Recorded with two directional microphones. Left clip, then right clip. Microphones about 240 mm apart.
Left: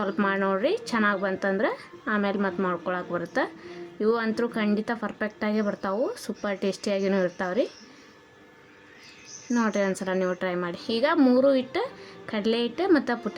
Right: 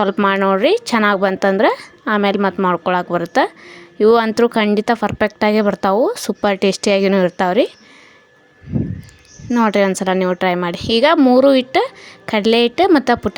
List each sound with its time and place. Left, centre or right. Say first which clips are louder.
0.0 s speech: right 11 dB; right
9.5 s speech: right 11 dB; right